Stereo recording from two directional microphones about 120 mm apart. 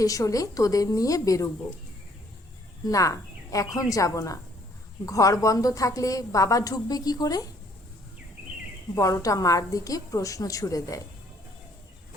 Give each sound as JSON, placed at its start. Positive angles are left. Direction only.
{"t": 0.0, "sound": "a woman's voice", "side_deg": 30}
{"t": 2.8, "sound": "a woman's voice", "side_deg": 30}
{"t": 9.0, "sound": "a woman's voice", "side_deg": 25}